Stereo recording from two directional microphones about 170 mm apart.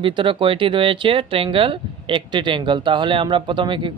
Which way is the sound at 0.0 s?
30° right (ahead or behind).